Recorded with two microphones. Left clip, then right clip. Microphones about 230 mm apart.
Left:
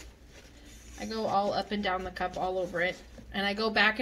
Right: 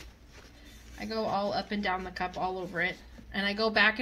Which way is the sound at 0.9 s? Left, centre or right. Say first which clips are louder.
Left 2 dB; right.